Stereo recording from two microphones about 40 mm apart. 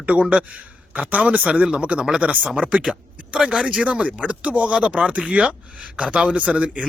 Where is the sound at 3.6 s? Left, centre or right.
Right.